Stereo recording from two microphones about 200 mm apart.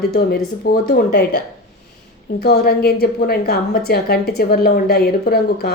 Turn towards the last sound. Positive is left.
turn(degrees=50)  # may be behind; listen again after turning